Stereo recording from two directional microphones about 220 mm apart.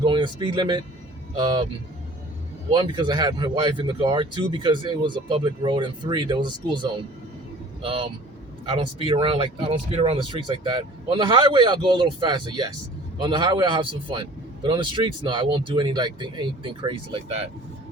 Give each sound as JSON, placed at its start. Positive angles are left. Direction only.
{"t": 0.0, "sound": "speech", "side_deg": -20}
{"t": 2.7, "sound": "speech", "side_deg": -20}